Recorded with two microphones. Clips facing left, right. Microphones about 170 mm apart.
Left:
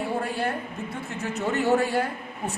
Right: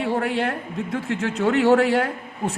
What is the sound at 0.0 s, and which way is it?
A woman's voice, 90° right.